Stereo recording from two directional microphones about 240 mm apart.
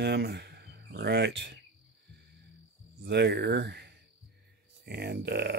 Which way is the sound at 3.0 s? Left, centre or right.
Right.